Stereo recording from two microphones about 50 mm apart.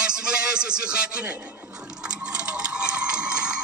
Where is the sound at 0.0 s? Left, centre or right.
Centre.